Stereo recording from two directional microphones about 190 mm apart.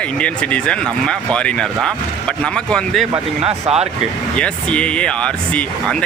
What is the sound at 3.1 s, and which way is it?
Speech, 30° right (ahead or behind).